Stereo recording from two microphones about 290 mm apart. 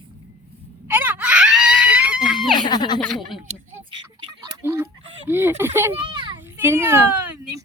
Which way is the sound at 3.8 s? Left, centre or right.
Centre.